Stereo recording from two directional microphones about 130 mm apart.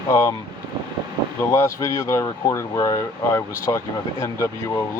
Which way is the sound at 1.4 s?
20° left (ahead or behind).